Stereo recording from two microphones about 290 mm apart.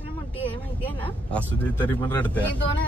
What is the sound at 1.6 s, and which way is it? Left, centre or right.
Speech, centre.